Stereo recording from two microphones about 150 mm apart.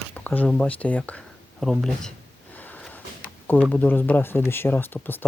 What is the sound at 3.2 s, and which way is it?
Speech, 10° left (ahead or behind).